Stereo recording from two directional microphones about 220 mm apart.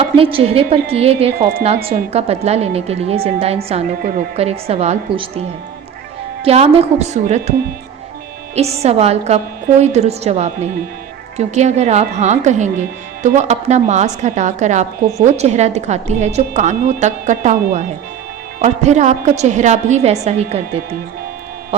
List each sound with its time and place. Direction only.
0.0 s a woman's voice: 25° right (ahead or behind)
6.4 s a woman's voice: 25° right (ahead or behind)
8.5 s a woman's voice: 30° right (ahead or behind)